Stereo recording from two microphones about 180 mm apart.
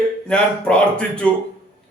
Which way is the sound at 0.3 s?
5° left (ahead or behind).